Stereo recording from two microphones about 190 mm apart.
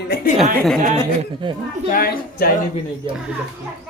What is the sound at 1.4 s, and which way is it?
Speech, 25° right (ahead or behind).